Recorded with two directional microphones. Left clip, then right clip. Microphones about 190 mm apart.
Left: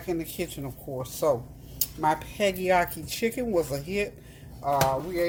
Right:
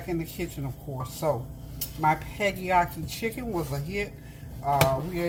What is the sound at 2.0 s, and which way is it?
Speech, 55° left (ahead or behind).